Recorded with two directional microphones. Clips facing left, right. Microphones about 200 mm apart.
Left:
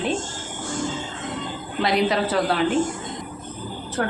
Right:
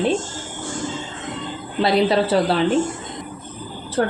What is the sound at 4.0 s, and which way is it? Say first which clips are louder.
Speech: right 5 dB; 35° right (ahead or behind).